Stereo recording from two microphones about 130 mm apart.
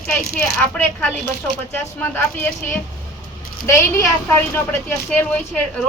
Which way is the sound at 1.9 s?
15° left (ahead or behind).